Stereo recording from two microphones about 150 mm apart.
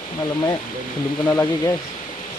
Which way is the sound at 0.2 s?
30° left (ahead or behind).